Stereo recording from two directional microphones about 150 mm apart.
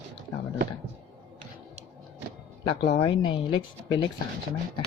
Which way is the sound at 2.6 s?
30° left (ahead or behind).